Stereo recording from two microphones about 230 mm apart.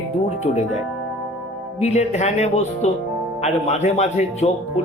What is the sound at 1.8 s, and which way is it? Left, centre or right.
Speech, left.